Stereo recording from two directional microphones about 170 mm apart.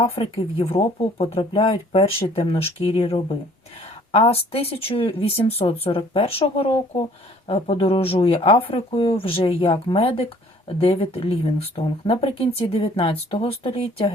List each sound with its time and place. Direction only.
0.0 s speech: 30° left (ahead or behind)